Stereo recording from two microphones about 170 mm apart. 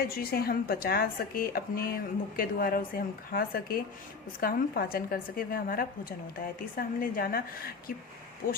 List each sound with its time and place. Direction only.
0.0 s speech: 65° left (ahead or behind)